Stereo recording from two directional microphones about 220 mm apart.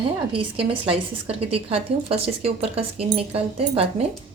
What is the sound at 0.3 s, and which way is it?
A woman's voice, 25° right (ahead or behind).